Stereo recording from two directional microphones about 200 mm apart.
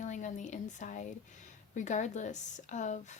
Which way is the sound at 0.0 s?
35° left (ahead or behind).